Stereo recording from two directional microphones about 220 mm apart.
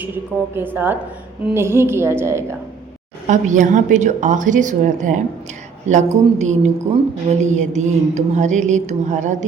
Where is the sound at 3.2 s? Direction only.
35° right (ahead or behind).